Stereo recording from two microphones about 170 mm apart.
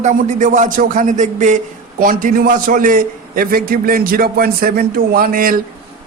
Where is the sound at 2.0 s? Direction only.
55° right (ahead or behind).